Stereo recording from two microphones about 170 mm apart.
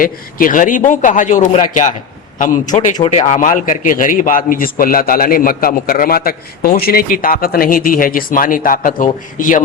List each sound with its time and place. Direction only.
0.0 s a man's voice: 55° left (ahead or behind)